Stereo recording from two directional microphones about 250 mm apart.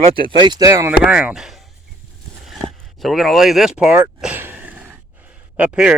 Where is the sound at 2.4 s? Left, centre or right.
Centre.